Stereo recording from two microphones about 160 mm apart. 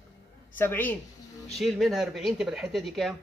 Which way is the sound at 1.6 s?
Centre (ahead or behind).